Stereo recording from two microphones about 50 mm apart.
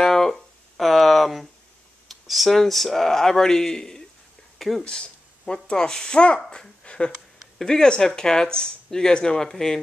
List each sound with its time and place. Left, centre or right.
0.0 s music: centre
2.0 s speech: centre
4.6 s speech: centre
4.8 s speech: centre
6.8 s a sound: left
7.5 s speech: centre